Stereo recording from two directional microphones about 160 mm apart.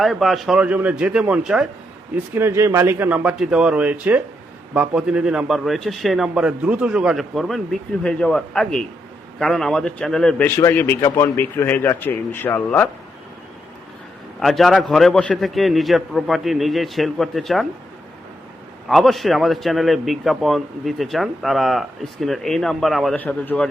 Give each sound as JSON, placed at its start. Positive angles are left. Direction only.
{"t": 0.0, "sound": "a man's voice", "side_deg": 0}
{"t": 14.3, "sound": "a man's voice", "side_deg": 0}
{"t": 18.9, "sound": "a man's voice", "side_deg": 0}